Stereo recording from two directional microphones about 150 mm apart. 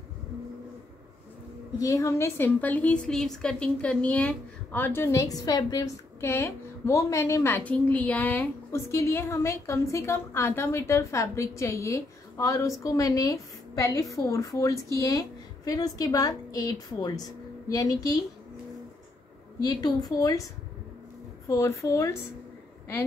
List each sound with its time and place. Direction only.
1.8 s a woman's voice: 20° left (ahead or behind)
19.6 s a woman's voice: 25° left (ahead or behind)
21.5 s a woman's voice: 20° left (ahead or behind)